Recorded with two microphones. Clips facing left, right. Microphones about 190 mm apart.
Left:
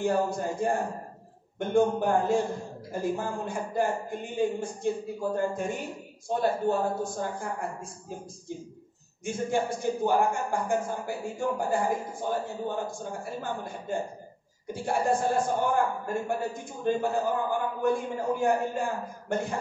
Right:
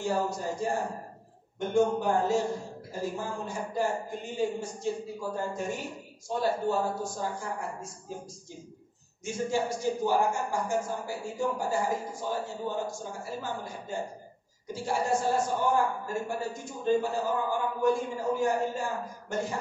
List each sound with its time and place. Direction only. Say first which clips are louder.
0.0 s a man's voice: left 3 dB; 55° left (ahead or behind)
9.2 s a man's voice: left 1 dB; 55° left (ahead or behind)